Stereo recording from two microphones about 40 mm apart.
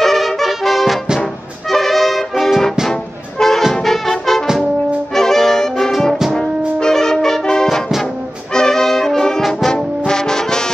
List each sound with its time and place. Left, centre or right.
0.0 s music: centre
3.7 s brass instrument: centre
5.1 s music: centre
6.8 s brass instrument: centre